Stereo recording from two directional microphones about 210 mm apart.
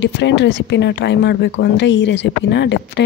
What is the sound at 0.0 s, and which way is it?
Speech, 55° left (ahead or behind).